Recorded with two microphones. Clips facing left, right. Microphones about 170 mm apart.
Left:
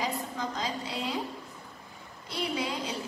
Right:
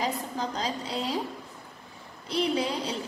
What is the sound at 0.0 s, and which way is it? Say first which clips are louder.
A woman's voice: right 2 dB; 30° right (ahead or behind).